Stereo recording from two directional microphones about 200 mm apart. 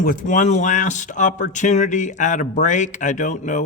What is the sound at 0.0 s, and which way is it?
A man's voice, 45° left (ahead or behind).